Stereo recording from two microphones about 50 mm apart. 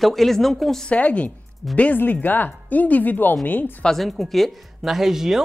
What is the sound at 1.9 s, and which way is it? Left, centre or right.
Speech, left.